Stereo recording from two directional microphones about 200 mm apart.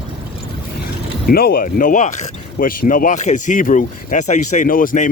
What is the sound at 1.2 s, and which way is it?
Speech, 50° left (ahead or behind).